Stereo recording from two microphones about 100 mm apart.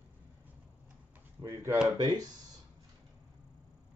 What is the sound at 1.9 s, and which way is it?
Speech, 45° right (ahead or behind).